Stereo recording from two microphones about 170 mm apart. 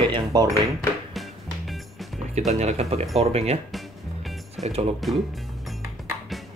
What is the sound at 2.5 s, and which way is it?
Speech, 40° right (ahead or behind).